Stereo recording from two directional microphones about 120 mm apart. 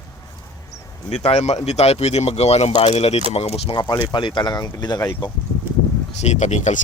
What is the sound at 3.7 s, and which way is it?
Speech, 35° left (ahead or behind).